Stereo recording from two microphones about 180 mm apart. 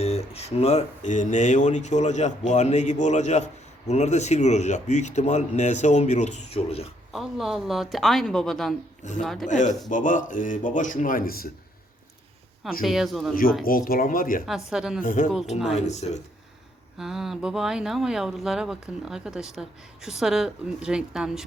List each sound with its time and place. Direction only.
0.0 s speech: 35° left (ahead or behind)
7.1 s speech: centre (ahead or behind)
9.5 s speech: 45° left (ahead or behind)
12.8 s speech: centre (ahead or behind)
13.7 s speech: 50° left (ahead or behind)
14.4 s speech: centre (ahead or behind)
15.0 s speech: 45° left (ahead or behind)
17.0 s speech: centre (ahead or behind)